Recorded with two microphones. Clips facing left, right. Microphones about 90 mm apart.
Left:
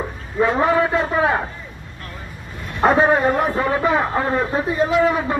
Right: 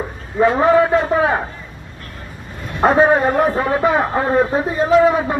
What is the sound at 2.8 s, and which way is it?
Speech, 5° right (ahead or behind).